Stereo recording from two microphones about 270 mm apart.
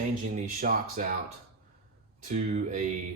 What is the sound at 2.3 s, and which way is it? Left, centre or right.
Speech, right.